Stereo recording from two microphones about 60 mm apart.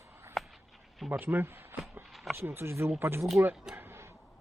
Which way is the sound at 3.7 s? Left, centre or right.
Right.